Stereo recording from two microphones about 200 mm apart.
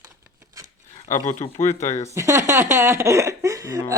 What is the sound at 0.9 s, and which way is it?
Speech, 35° left (ahead or behind).